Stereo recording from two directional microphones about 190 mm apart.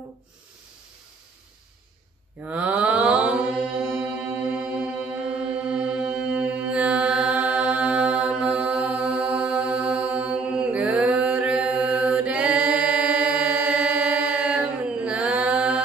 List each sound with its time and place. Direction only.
2.4 s mantra: 5° right (ahead or behind)